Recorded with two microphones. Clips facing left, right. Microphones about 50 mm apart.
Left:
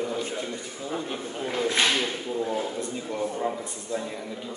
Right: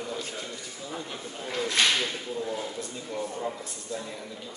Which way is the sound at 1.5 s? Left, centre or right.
Centre.